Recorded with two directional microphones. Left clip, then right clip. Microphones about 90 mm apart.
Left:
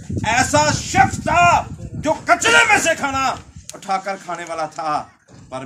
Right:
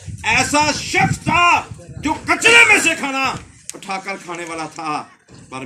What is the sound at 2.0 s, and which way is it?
Music, 40° left (ahead or behind).